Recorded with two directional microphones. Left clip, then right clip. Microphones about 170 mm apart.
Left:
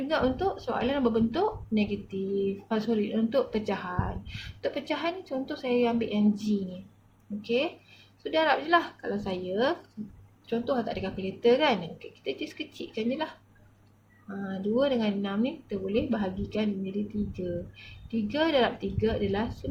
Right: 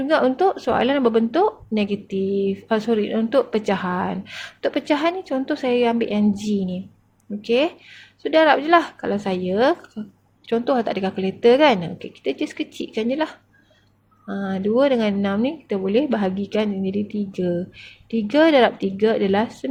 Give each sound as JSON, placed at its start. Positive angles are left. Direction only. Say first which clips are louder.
{"t": 0.1, "sound": "a woman's voice", "louder": "right 10 dB", "side_deg": -50}